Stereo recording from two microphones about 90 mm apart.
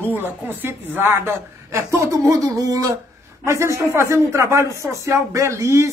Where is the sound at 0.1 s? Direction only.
20° right (ahead or behind).